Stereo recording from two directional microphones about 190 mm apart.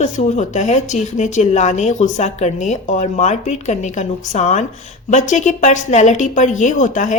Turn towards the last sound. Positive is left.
turn(degrees=40)  # may be behind; listen again after turning